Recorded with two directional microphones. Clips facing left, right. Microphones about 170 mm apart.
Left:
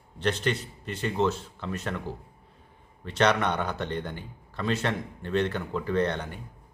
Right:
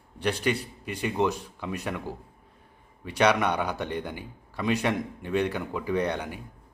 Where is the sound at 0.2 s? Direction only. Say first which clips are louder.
Right 1 dB; 10° right (ahead or behind).